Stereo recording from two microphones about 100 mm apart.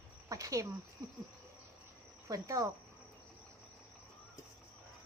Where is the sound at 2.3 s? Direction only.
35° right (ahead or behind).